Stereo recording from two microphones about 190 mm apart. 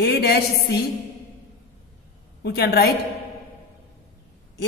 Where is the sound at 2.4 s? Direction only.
55° left (ahead or behind).